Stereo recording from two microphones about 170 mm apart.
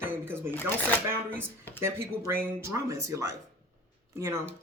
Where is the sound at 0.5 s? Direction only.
10° left (ahead or behind).